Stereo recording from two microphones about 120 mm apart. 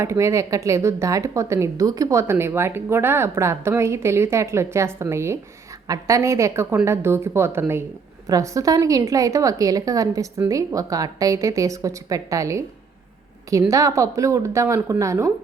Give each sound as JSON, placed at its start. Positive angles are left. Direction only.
{"t": 0.0, "sound": "speech", "side_deg": -25}